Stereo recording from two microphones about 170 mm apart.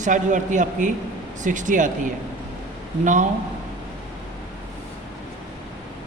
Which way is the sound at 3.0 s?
45° right (ahead or behind).